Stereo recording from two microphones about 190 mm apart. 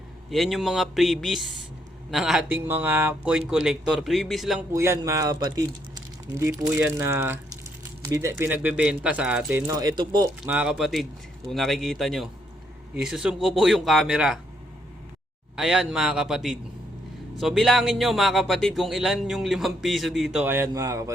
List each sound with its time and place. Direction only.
0.3 s speech: centre (ahead or behind)
4.7 s speech: 15° right (ahead or behind)
10.4 s speech: 5° right (ahead or behind)
15.5 s speech: centre (ahead or behind)